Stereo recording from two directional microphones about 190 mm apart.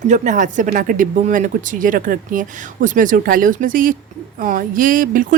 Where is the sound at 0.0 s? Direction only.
40° right (ahead or behind).